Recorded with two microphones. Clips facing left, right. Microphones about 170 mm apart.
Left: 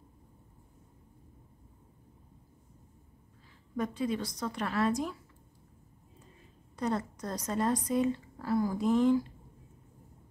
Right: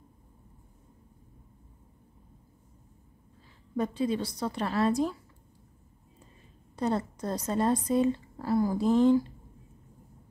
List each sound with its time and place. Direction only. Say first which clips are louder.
3.7 s a woman's voice: right 3 dB; 30° right (ahead or behind)
6.8 s a woman's voice: right 3 dB; 30° right (ahead or behind)